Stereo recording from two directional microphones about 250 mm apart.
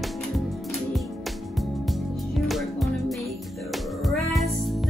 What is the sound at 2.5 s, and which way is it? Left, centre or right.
Music, centre.